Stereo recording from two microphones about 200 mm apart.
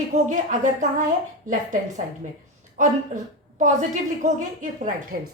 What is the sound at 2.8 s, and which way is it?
A woman's voice, 40° right (ahead or behind).